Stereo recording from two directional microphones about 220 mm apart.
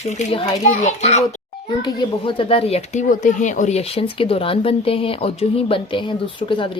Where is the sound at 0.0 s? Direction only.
30° left (ahead or behind).